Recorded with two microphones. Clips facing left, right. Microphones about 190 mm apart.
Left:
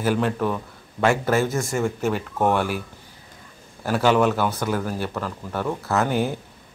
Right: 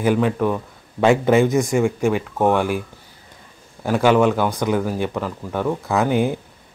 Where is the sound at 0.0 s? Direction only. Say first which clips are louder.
Right 4 dB; 10° right (ahead or behind).